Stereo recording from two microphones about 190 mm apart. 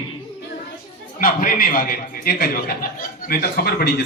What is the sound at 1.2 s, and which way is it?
A man's voice, 45° left (ahead or behind).